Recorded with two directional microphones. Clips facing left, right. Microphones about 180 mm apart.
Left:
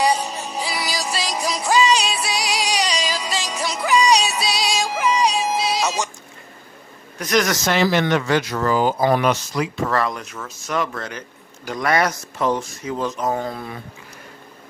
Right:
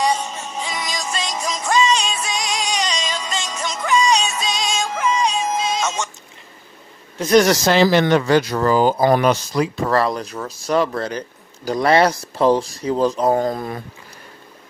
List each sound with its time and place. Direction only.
0.1 s music: 35° left (ahead or behind)
7.2 s speech: 30° right (ahead or behind)